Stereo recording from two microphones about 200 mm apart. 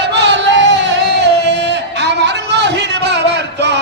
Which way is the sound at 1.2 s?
60° right (ahead or behind).